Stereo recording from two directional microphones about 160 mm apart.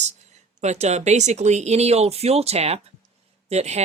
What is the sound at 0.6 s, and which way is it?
Speech, 45° right (ahead or behind).